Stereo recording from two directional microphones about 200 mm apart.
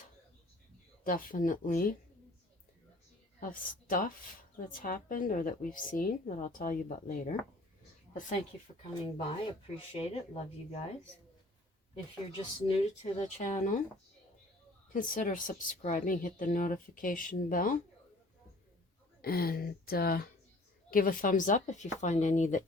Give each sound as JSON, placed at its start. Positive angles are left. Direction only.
{"t": 1.0, "sound": "speech", "side_deg": 45}
{"t": 3.4, "sound": "speech", "side_deg": 45}
{"t": 8.8, "sound": "speech", "side_deg": 25}
{"t": 12.6, "sound": "speech", "side_deg": 30}
{"t": 14.9, "sound": "speech", "side_deg": 40}
{"t": 19.2, "sound": "speech", "side_deg": 50}